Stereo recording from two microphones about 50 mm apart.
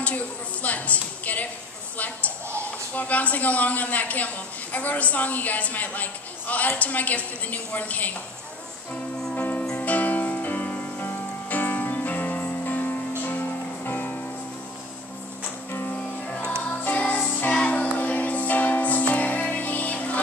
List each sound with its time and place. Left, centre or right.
0.0 s a woman's voice: left
9.3 s music: left
15.9 s music: left
16.6 s music: left